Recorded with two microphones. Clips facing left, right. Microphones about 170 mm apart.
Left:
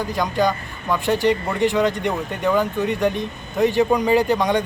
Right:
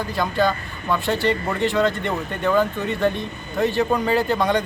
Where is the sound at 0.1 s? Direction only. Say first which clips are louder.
Even; 15° left (ahead or behind).